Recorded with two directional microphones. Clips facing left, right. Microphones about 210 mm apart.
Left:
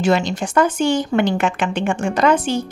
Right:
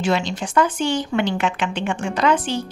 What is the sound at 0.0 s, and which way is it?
A woman's voice, 45° left (ahead or behind).